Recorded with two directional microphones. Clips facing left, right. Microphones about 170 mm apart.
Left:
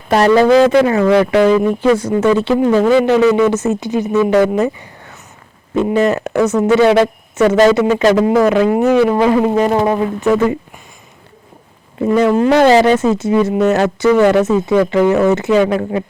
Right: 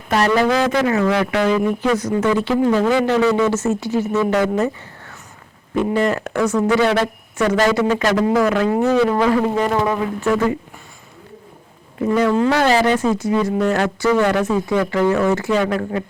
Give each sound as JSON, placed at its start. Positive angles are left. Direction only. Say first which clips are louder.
{"t": 0.1, "sound": "speech", "louder": "left 7 dB", "side_deg": 30}
{"t": 10.2, "sound": "speech", "louder": "left 4 dB", "side_deg": 20}
{"t": 12.0, "sound": "speech", "louder": "left 4 dB", "side_deg": 20}